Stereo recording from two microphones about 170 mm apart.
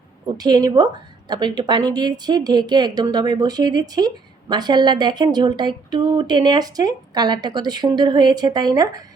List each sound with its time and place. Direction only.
0.3 s speech: 25° right (ahead or behind)